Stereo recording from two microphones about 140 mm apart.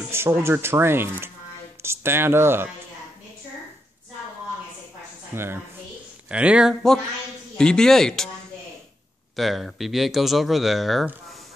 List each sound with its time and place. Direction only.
0.1 s speech: 20° right (ahead or behind)
5.3 s speech: 15° right (ahead or behind); by 8.3 s 5° left (ahead or behind)
9.4 s speech: centre (ahead or behind)